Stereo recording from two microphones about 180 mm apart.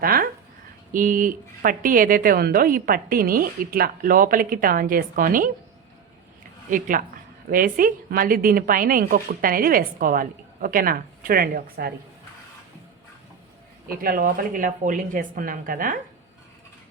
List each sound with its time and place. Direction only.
0.0 s a sound: 55° right (ahead or behind)
0.9 s a woman's voice: 50° right (ahead or behind)
6.7 s a woman's voice: 50° right (ahead or behind)
13.8 s a woman's voice: 55° right (ahead or behind)